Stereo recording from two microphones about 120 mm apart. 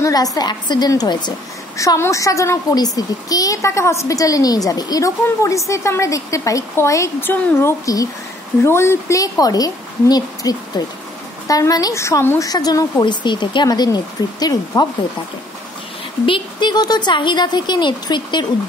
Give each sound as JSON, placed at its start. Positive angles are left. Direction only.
{"t": 0.0, "sound": "a child's voice", "side_deg": 30}
{"t": 12.4, "sound": "speech", "side_deg": 35}
{"t": 16.3, "sound": "speech", "side_deg": 40}